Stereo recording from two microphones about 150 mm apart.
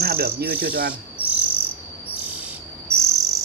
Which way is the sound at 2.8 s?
20° right (ahead or behind).